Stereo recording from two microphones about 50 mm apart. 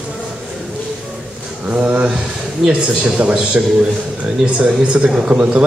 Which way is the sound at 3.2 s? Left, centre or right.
Right.